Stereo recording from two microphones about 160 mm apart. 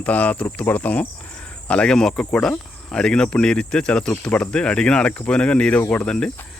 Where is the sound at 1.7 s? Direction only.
5° left (ahead or behind).